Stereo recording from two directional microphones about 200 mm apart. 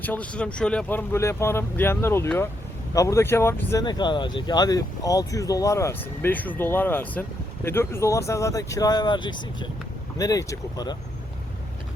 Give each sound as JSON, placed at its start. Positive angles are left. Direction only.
{"t": 0.0, "sound": "speech", "side_deg": 10}